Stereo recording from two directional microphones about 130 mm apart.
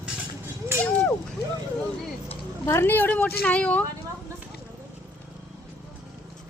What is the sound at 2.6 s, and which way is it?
Speech, 15° left (ahead or behind).